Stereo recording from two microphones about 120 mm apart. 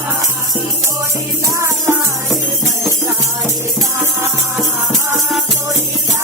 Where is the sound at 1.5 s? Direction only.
20° right (ahead or behind).